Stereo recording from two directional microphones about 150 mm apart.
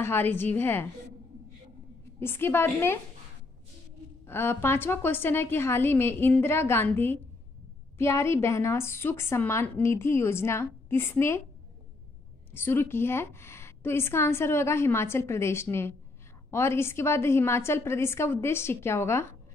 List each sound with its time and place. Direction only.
0.0 s a woman's voice: 15° left (ahead or behind)
2.1 s a woman's voice: 15° left (ahead or behind)
4.3 s a woman's voice: 15° left (ahead or behind)
12.5 s a woman's voice: 15° left (ahead or behind)